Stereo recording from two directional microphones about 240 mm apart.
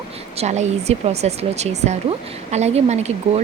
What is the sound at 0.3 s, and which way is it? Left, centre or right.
Speech, right.